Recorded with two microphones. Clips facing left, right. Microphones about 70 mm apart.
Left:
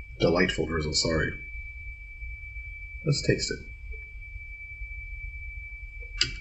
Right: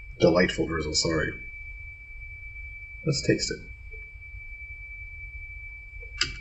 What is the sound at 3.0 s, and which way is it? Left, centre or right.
Speech, centre.